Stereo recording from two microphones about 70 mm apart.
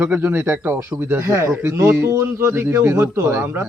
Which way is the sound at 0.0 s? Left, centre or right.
Right.